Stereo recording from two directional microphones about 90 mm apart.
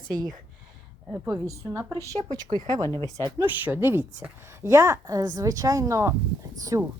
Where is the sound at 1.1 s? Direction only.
20° right (ahead or behind).